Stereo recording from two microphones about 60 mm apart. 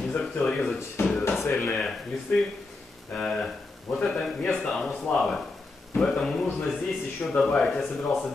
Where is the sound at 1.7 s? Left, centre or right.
Centre.